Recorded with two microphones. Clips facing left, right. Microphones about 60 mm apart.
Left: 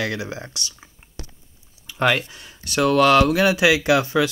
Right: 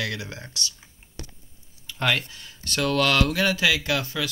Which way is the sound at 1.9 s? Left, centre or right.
Centre.